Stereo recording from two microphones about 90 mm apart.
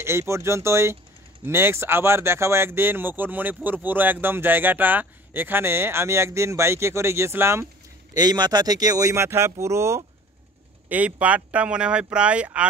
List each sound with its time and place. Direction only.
0.0 s speech: 30° right (ahead or behind)
8.1 s speech: 50° right (ahead or behind)
9.1 s speech: 30° right (ahead or behind)
10.9 s speech: 15° right (ahead or behind)